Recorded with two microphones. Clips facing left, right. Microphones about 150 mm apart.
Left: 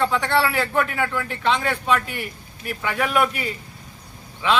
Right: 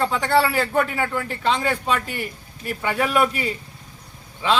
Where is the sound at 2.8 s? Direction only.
30° right (ahead or behind).